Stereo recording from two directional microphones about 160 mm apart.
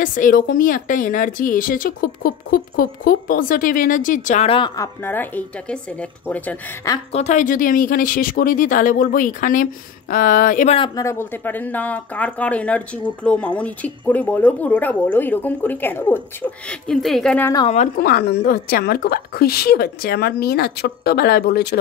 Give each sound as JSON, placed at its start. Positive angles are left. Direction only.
{"t": 0.0, "sound": "speech", "side_deg": 55}
{"t": 4.5, "sound": "speech", "side_deg": 30}
{"t": 5.0, "sound": "speech", "side_deg": 10}
{"t": 7.1, "sound": "speech", "side_deg": 45}
{"t": 11.0, "sound": "a woman's voice", "side_deg": 15}
{"t": 17.9, "sound": "a woman's voice", "side_deg": 75}